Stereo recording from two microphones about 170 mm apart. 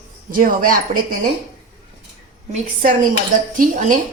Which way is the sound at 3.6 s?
50° right (ahead or behind).